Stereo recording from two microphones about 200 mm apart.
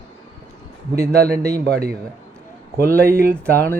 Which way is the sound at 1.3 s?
15° right (ahead or behind).